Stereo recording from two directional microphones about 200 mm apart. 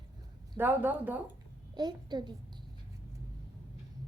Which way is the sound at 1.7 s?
20° right (ahead or behind).